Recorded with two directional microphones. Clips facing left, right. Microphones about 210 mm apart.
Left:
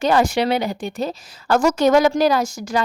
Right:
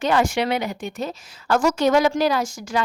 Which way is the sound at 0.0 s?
35° left (ahead or behind).